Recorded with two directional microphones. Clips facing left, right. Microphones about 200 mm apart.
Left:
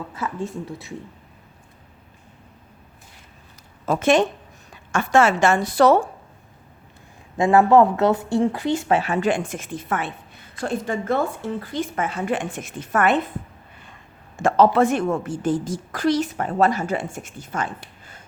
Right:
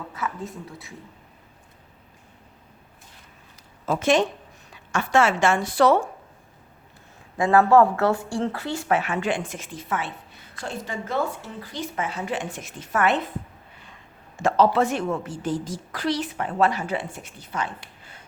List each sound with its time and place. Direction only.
0.2 s speech: 25° left (ahead or behind)
3.8 s a woman's voice: 50° left (ahead or behind)
7.3 s speech: 25° left (ahead or behind)
9.0 s a woman's voice: 35° left (ahead or behind); by 13.2 s 50° left (ahead or behind)
14.3 s a woman's voice: 50° left (ahead or behind)